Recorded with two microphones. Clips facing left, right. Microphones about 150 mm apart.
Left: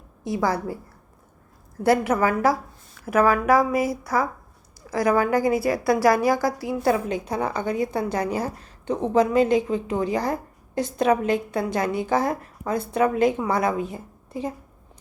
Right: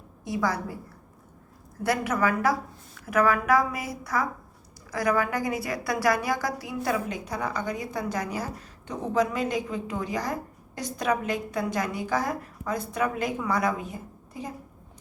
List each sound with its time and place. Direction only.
0.3 s a woman's voice: 30° left (ahead or behind)
1.8 s a woman's voice: 30° left (ahead or behind)